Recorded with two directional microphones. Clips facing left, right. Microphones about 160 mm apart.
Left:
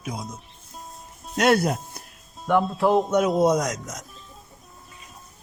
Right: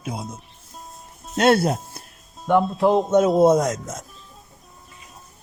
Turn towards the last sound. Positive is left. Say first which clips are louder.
# right 4 dB
turn(degrees=-25)  # may be behind; listen again after turning